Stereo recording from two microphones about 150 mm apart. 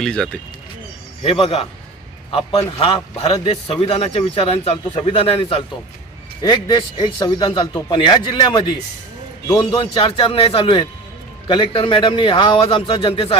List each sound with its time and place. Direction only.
0.0 s speech: 5° left (ahead or behind)
1.2 s a man's voice: 40° left (ahead or behind)
2.8 s a man's voice: 40° left (ahead or behind)
6.4 s a man's voice: 25° left (ahead or behind)